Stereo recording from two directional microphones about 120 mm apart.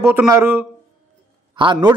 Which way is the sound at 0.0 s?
20° right (ahead or behind).